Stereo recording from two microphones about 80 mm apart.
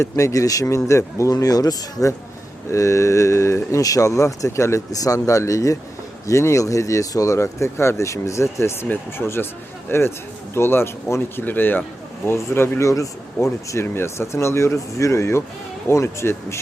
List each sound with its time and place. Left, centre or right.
0.0 s speech: left
12.9 s speech: left